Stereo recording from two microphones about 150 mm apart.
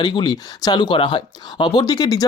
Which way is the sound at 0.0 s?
30° left (ahead or behind).